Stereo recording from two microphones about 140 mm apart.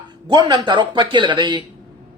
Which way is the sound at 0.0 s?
30° right (ahead or behind).